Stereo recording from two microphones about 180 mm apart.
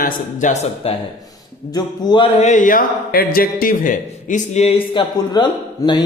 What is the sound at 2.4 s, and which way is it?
A man's voice, 40° left (ahead or behind).